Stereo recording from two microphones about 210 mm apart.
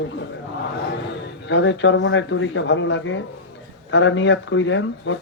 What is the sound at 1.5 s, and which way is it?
Speech, 60° left (ahead or behind).